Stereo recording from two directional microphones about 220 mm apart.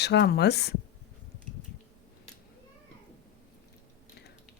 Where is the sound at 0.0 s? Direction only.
50° left (ahead or behind).